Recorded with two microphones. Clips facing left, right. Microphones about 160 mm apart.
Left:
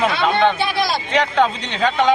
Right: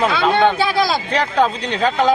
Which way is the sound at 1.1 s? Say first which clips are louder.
Even; 35° right (ahead or behind).